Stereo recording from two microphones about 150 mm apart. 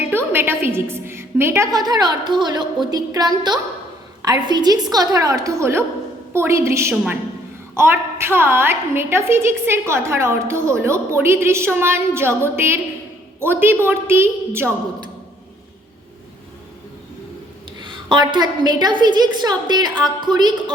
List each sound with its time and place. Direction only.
0.1 s a woman's voice: 15° right (ahead or behind)
17.7 s a woman's voice: 30° right (ahead or behind)